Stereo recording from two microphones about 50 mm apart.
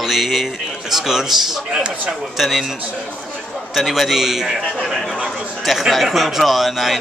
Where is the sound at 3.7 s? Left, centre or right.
Centre.